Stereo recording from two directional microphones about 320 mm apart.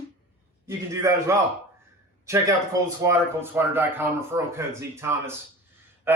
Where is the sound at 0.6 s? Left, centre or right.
Centre.